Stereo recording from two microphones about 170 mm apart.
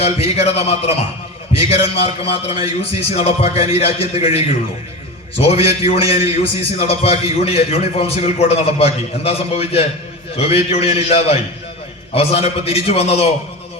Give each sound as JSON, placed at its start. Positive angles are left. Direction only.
{"t": 0.0, "sound": "a man's voice", "side_deg": 35}
{"t": 1.5, "sound": "a sound", "side_deg": 40}
{"t": 2.2, "sound": "a man's voice", "side_deg": 35}